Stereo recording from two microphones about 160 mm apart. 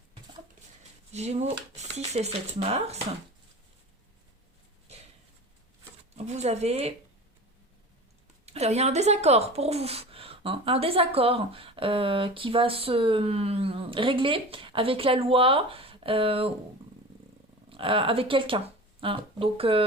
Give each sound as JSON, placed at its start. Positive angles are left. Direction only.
{"t": 1.1, "sound": "speech", "side_deg": -45}
{"t": 6.1, "sound": "speech", "side_deg": -45}
{"t": 8.5, "sound": "speech", "side_deg": -40}
{"t": 17.7, "sound": "speech", "side_deg": -35}